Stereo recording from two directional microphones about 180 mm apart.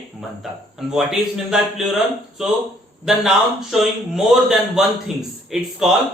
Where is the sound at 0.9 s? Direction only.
Centre (ahead or behind).